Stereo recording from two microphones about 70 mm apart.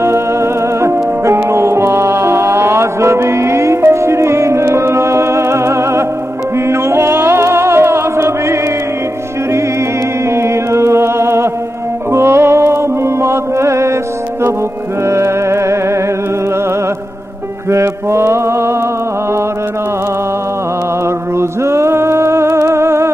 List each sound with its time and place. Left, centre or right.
0.0 s music: right
15.0 s music: right
17.6 s mantra: right
21.4 s music: right